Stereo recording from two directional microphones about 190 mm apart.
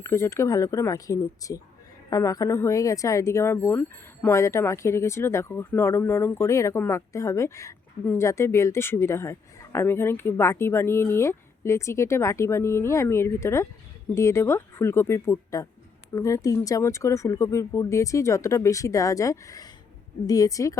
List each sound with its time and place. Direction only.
0.0 s a woman's voice: 15° left (ahead or behind)